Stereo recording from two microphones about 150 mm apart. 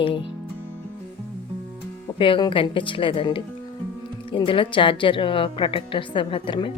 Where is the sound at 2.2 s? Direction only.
35° left (ahead or behind).